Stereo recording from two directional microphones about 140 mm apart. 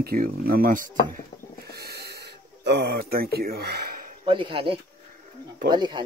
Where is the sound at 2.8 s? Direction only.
90° right.